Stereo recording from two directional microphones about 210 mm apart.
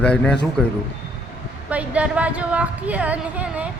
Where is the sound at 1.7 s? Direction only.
5° right (ahead or behind).